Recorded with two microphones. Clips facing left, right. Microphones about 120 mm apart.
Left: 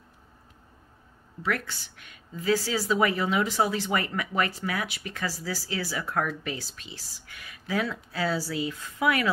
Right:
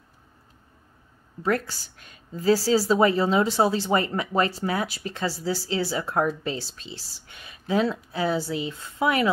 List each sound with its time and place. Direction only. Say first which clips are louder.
1.4 s a woman's voice: right 5 dB; 35° right (ahead or behind)